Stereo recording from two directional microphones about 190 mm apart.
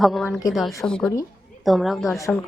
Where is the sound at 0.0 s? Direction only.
Centre (ahead or behind).